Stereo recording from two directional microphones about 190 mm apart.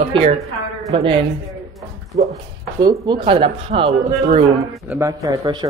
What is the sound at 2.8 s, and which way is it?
Speech, 20° right (ahead or behind).